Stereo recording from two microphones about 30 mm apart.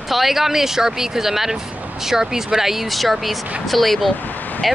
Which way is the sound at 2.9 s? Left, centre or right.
Centre.